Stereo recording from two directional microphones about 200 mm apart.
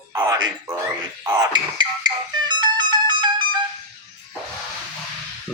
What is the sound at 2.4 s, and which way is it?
Music, 20° right (ahead or behind).